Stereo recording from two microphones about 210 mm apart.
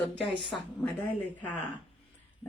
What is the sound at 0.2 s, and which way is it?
Speech, 25° left (ahead or behind).